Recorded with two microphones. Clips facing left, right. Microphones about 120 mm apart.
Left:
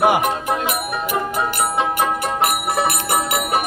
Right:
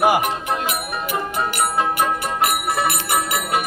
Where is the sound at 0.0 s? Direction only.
5° right (ahead or behind).